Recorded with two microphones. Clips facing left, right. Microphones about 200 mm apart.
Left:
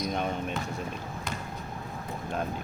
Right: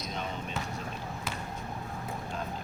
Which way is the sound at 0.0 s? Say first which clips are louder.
Left 7 dB; 55° left (ahead or behind).